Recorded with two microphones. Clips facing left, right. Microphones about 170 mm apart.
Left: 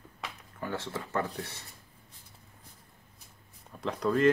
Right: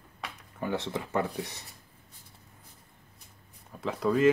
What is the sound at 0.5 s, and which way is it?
Speech, 20° right (ahead or behind).